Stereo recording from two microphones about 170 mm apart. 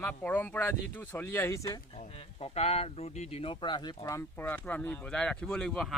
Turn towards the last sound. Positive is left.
turn(degrees=5)  # may be behind; listen again after turning